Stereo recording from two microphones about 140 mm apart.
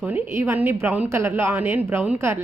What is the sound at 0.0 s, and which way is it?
A woman's voice, 10° right (ahead or behind).